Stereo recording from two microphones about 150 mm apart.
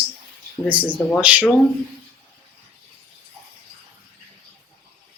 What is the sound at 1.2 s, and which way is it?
Speech, 10° right (ahead or behind).